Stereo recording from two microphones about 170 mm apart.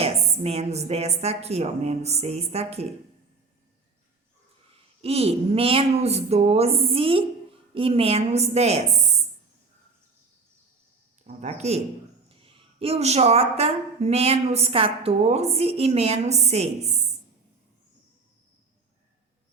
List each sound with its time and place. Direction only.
0.0 s a woman's voice: 35° right (ahead or behind)
5.0 s a woman's voice: 35° right (ahead or behind)
11.2 s a sound: 45° right (ahead or behind)
12.3 s a woman's voice: 30° right (ahead or behind)